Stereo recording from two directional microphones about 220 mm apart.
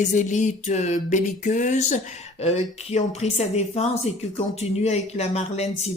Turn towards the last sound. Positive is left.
turn(degrees=30)  # may be behind; listen again after turning